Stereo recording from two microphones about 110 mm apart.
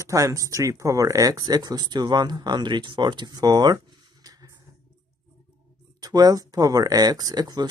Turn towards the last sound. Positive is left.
turn(degrees=-40)  # may be behind; listen again after turning